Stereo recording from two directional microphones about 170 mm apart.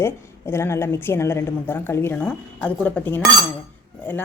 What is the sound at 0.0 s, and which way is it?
A woman's voice, 15° left (ahead or behind).